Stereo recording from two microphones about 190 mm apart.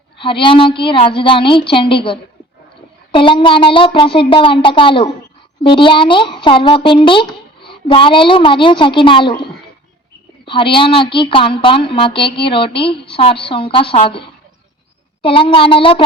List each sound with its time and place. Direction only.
0.2 s a woman's voice: 25° left (ahead or behind)